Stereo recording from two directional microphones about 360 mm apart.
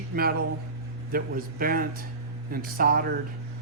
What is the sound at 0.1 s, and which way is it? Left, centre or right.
Speech, right.